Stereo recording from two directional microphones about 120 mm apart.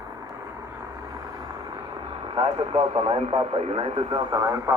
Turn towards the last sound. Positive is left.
turn(degrees=-25)  # may be behind; listen again after turning